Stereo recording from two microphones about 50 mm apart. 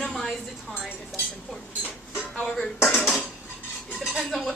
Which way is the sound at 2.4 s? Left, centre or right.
Centre.